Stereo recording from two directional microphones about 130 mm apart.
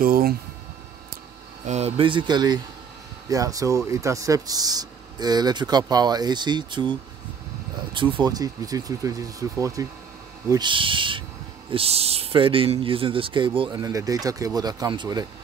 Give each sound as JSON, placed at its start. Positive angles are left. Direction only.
{"t": 1.7, "sound": "speech", "side_deg": -55}
{"t": 10.5, "sound": "a man's voice", "side_deg": -40}